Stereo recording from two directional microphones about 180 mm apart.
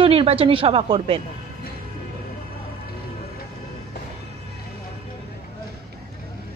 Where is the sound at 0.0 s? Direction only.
30° right (ahead or behind).